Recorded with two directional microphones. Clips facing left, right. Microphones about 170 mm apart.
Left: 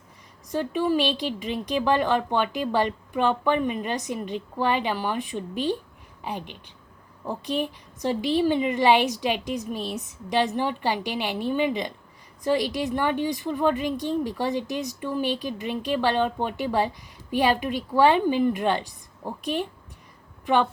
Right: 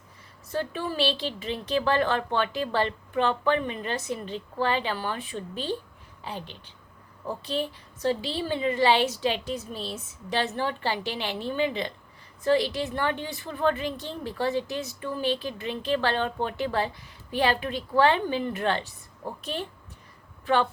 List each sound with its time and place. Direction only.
0.5 s a woman's voice: 15° left (ahead or behind)